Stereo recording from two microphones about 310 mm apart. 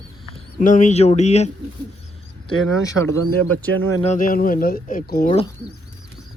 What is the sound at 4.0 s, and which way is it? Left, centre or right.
Speech, left.